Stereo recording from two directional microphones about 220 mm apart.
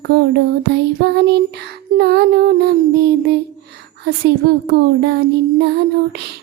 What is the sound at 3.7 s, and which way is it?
A woman's voice, 50° right (ahead or behind).